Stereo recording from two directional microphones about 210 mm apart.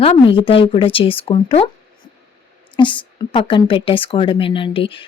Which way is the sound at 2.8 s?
25° left (ahead or behind).